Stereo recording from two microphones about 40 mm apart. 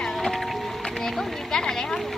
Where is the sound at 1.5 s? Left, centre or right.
Centre.